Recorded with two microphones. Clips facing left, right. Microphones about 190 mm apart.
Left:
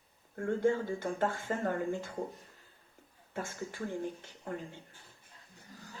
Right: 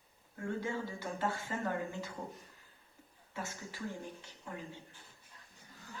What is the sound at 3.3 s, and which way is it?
Speech, 50° left (ahead or behind).